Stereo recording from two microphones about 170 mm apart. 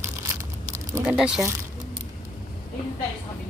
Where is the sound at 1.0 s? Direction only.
5° right (ahead or behind).